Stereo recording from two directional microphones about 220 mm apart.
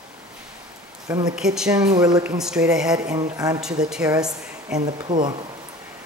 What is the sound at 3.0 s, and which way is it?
Speech, 15° right (ahead or behind).